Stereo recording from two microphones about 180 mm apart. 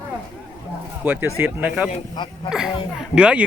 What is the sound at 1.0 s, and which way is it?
Speech, 10° right (ahead or behind).